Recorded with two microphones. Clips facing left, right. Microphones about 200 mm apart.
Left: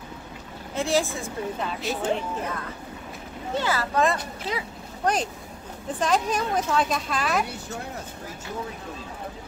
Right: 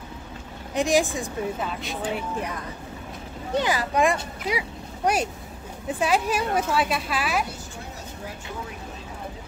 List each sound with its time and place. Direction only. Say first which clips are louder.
0.7 s a woman's voice: right 3 dB; 15° right (ahead or behind)
1.6 s speech: left 2 dB; centre (ahead or behind)
2.1 s a woman's voice: even; 15° right (ahead or behind)